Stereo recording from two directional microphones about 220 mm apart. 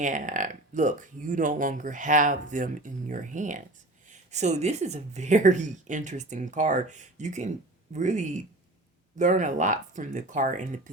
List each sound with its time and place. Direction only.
0.0 s speech: 35° right (ahead or behind)